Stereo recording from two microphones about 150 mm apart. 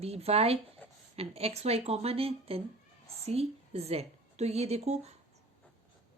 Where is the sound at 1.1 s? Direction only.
45° right (ahead or behind).